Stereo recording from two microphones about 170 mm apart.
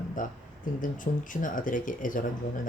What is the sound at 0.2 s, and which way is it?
Speech, 50° left (ahead or behind).